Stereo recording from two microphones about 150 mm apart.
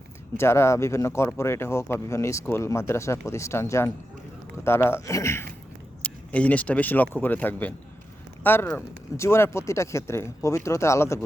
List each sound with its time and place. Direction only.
0.3 s speech: 15° left (ahead or behind)